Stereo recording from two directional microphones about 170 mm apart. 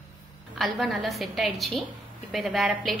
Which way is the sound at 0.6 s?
Centre (ahead or behind).